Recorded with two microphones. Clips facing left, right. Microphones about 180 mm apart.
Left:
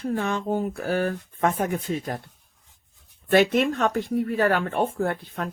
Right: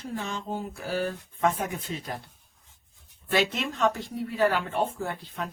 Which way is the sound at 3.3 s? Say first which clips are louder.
Left 8 dB; 55° left (ahead or behind).